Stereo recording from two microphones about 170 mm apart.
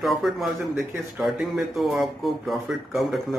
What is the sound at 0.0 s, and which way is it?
Speech, centre (ahead or behind).